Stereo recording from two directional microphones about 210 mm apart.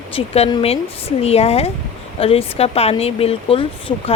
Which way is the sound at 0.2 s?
30° left (ahead or behind).